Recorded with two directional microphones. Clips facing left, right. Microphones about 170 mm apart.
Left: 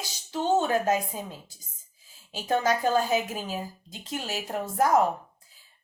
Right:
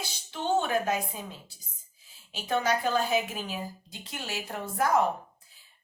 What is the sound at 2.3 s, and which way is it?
A woman's voice, 45° left (ahead or behind).